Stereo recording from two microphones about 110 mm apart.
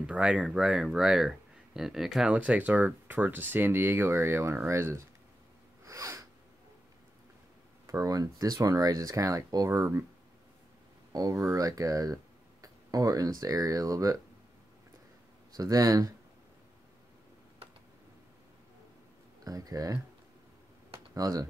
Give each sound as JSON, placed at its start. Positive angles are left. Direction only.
{"t": 0.0, "sound": "speech", "side_deg": -10}
{"t": 5.9, "sound": "snort", "side_deg": -30}
{"t": 7.8, "sound": "speech", "side_deg": -30}
{"t": 11.1, "sound": "speech", "side_deg": -30}
{"t": 15.5, "sound": "speech", "side_deg": -35}
{"t": 19.4, "sound": "speech", "side_deg": -35}
{"t": 21.1, "sound": "speech", "side_deg": -30}